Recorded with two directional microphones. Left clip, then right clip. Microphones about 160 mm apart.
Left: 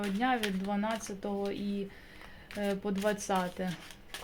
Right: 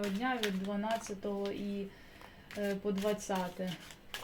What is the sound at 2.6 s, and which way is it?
Speech, 40° left (ahead or behind).